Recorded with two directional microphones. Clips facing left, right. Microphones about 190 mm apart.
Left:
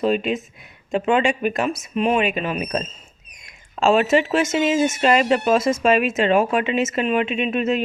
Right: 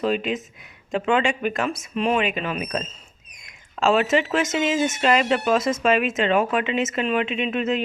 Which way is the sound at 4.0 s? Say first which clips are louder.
Left 3 dB; 25° left (ahead or behind).